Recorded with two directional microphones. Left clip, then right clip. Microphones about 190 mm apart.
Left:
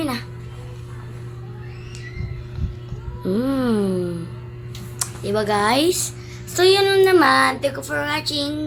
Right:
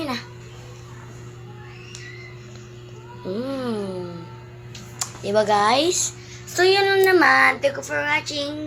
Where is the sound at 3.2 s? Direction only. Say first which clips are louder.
Left 5 dB; 25° left (ahead or behind).